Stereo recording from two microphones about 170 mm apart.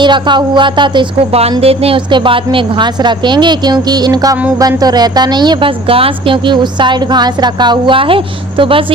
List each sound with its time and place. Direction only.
0.0 s speech: 25° right (ahead or behind)